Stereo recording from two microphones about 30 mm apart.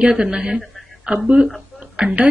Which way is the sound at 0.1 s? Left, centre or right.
Right.